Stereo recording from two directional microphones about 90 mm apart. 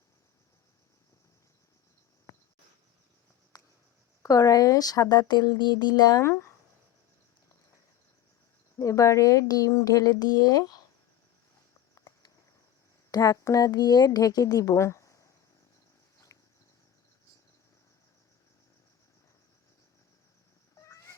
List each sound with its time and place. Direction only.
2.3 s cricket: 35° left (ahead or behind)
3.5 s a sound: 50° left (ahead or behind)
4.2 s speech: 40° left (ahead or behind)
8.8 s speech: 35° left (ahead or behind)
13.1 s speech: 40° left (ahead or behind)
20.7 s cat: 35° left (ahead or behind)